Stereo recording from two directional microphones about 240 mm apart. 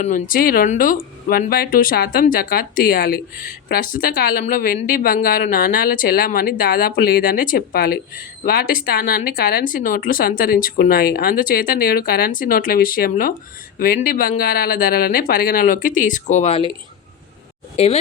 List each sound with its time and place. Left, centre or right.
0.0 s speech: left
17.7 s speech: left